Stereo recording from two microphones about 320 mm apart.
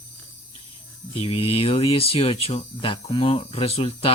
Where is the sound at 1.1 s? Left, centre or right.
Centre.